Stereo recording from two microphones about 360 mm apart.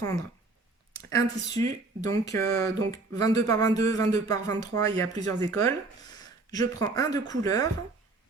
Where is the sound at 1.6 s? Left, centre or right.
Centre.